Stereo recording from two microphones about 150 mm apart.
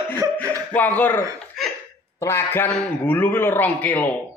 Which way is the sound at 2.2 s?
15° left (ahead or behind).